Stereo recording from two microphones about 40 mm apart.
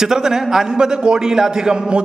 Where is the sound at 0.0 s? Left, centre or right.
Centre.